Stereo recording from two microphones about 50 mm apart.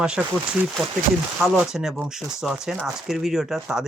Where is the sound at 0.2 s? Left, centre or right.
Right.